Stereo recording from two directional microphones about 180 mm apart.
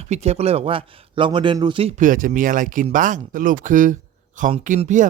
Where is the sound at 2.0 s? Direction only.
50° right (ahead or behind).